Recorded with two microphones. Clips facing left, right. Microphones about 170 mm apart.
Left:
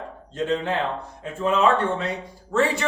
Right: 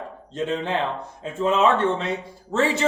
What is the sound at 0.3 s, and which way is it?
A man's voice, 20° right (ahead or behind).